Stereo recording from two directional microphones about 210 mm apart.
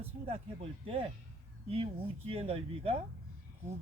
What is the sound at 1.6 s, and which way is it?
Speech, 25° right (ahead or behind).